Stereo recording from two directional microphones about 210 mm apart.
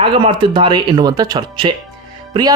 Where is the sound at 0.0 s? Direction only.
25° right (ahead or behind).